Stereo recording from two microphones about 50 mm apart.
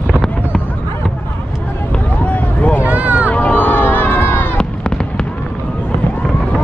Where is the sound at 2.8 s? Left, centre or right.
Right.